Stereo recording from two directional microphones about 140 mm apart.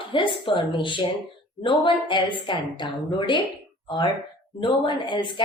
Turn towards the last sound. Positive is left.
turn(degrees=35)  # may be behind; listen again after turning